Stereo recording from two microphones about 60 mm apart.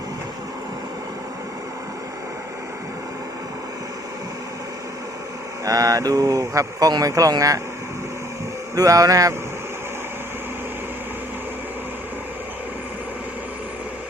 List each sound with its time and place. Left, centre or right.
5.6 s speech: right
8.7 s speech: right